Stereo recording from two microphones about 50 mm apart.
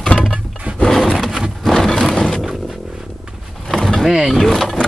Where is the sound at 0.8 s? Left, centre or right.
Centre.